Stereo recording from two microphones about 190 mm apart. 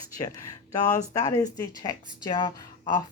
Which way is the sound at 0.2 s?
20° left (ahead or behind).